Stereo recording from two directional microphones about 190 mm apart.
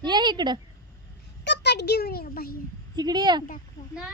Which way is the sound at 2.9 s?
20° right (ahead or behind).